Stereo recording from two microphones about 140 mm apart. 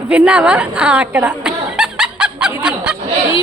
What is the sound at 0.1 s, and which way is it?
Chuckle, 10° right (ahead or behind).